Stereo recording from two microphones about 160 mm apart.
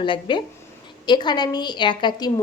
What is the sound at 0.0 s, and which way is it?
A woman's voice, 30° left (ahead or behind).